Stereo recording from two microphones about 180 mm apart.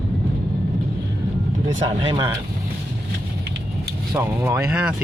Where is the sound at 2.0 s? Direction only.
30° right (ahead or behind).